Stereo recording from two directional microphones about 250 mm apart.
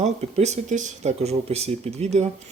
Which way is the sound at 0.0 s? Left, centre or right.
Right.